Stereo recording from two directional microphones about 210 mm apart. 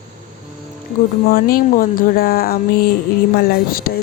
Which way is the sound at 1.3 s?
45° left (ahead or behind).